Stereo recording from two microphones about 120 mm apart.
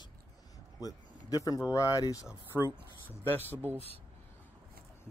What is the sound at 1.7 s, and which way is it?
Speech, 30° left (ahead or behind).